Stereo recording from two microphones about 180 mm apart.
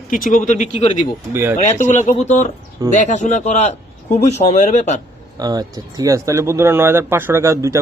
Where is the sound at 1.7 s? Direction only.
40° left (ahead or behind).